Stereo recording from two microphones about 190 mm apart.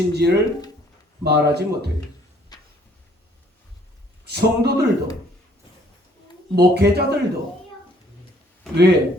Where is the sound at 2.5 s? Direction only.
20° left (ahead or behind).